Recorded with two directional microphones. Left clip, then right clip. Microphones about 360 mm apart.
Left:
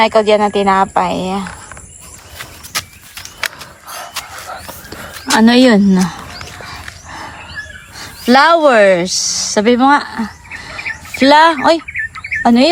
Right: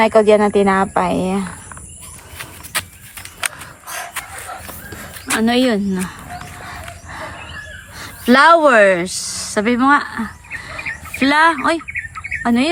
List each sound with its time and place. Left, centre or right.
0.0 s speech: centre
2.4 s vehicle: centre
5.4 s speech: centre
6.6 s dog: centre
7.9 s speech: centre